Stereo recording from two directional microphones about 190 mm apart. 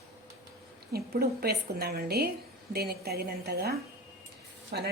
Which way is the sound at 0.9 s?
55° right (ahead or behind).